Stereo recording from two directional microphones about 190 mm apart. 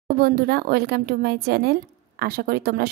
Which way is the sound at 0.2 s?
55° right (ahead or behind).